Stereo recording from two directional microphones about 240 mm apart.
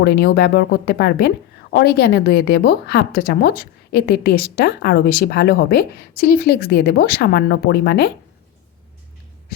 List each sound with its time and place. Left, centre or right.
0.0 s a woman's voice: left